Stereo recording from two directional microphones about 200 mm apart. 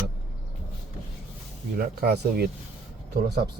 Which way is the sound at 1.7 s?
50° right (ahead or behind).